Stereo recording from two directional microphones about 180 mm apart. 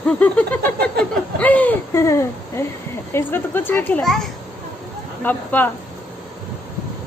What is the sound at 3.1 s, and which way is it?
A child's voice, 10° left (ahead or behind).